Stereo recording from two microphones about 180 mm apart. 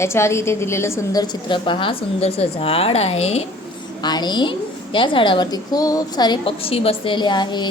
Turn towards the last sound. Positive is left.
turn(degrees=25)  # may be behind; listen again after turning